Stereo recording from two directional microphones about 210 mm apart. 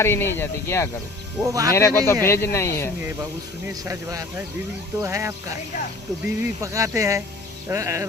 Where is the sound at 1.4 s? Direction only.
15° right (ahead or behind).